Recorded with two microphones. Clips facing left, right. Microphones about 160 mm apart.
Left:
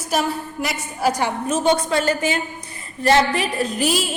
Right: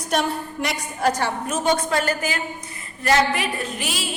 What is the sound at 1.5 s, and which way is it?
A woman's voice, 25° left (ahead or behind).